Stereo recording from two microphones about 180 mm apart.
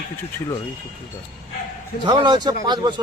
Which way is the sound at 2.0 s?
25° right (ahead or behind).